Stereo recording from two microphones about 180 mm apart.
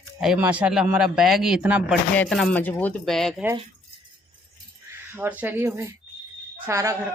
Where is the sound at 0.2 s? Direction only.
5° right (ahead or behind).